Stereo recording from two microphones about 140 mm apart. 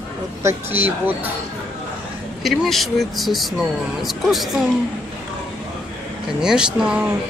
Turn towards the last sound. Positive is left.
turn(degrees=-5)  # may be behind; listen again after turning